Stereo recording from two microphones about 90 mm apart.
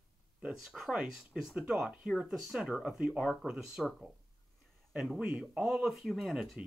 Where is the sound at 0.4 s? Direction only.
5° right (ahead or behind).